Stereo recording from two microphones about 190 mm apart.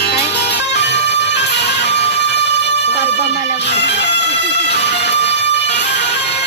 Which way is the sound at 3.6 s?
65° left (ahead or behind).